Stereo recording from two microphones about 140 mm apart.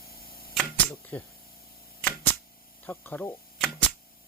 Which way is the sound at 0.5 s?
Centre (ahead or behind).